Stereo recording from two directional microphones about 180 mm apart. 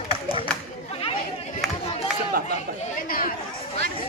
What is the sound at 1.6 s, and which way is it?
Crowd, centre (ahead or behind).